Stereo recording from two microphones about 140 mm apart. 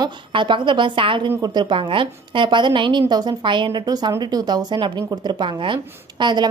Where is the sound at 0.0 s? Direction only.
35° right (ahead or behind).